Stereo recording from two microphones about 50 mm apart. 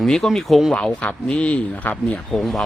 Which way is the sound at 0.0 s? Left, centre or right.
Centre.